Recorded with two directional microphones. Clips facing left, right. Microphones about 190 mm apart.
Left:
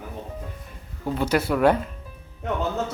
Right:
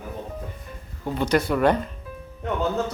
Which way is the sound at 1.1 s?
5° left (ahead or behind).